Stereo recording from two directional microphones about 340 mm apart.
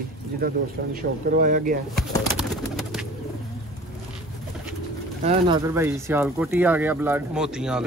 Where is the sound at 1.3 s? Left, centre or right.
Right.